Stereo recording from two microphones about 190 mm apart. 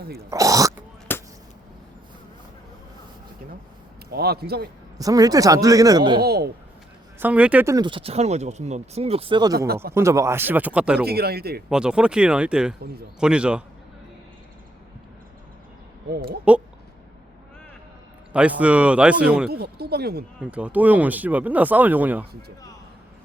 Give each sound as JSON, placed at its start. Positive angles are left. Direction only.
{"t": 0.2, "sound": "speech", "side_deg": -15}
{"t": 1.1, "sound": "a sound", "side_deg": 10}
{"t": 4.1, "sound": "speech", "side_deg": -55}
{"t": 4.9, "sound": "speech", "side_deg": -20}
{"t": 6.2, "sound": "speech", "side_deg": -55}
{"t": 7.2, "sound": "speech", "side_deg": -5}
{"t": 11.0, "sound": "speech", "side_deg": -55}
{"t": 11.7, "sound": "speech", "side_deg": -5}
{"t": 16.0, "sound": "speech", "side_deg": -55}
{"t": 18.3, "sound": "speech", "side_deg": -5}
{"t": 19.5, "sound": "speech", "side_deg": -55}
{"t": 20.4, "sound": "speech", "side_deg": -5}
{"t": 22.3, "sound": "speech", "side_deg": -55}